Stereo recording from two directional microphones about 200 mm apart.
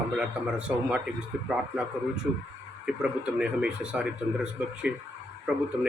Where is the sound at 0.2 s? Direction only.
5° right (ahead or behind).